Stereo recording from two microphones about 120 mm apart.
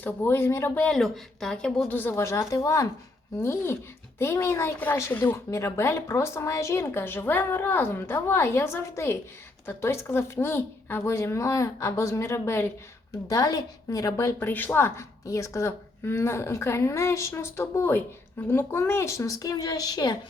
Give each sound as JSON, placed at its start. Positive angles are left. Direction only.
{"t": 0.0, "sound": "a woman's voice", "side_deg": 20}
{"t": 0.9, "sound": "a woman's voice", "side_deg": 0}
{"t": 1.9, "sound": "a woman's voice", "side_deg": 15}